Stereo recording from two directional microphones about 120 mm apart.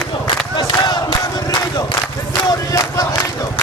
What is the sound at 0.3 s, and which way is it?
Battle cry, 35° left (ahead or behind).